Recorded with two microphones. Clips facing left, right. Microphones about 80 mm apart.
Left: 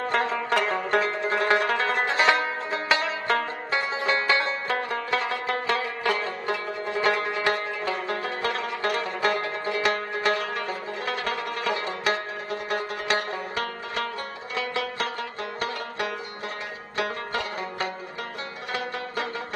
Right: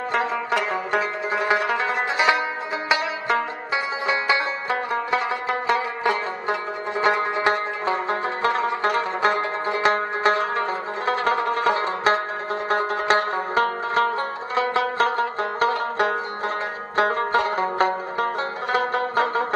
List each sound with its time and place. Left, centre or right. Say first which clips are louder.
0.1 s zither: right 2 dB; centre
2.9 s music: right 2 dB; centre; by 16.2 s right
16.9 s banjo: right 9 dB; right